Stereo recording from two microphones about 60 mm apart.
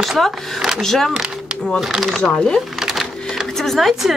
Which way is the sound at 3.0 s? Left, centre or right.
Centre.